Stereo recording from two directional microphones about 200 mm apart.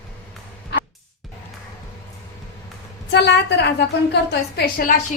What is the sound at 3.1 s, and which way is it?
Speech, 60° left (ahead or behind).